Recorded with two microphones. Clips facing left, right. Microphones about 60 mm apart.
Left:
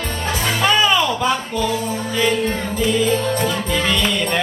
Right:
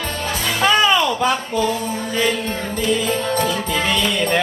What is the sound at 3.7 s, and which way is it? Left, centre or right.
Music, centre.